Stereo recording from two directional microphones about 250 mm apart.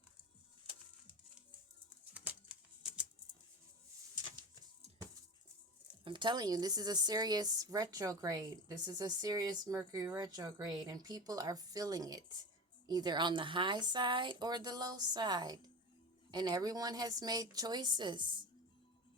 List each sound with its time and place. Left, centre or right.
6.1 s a woman's voice: centre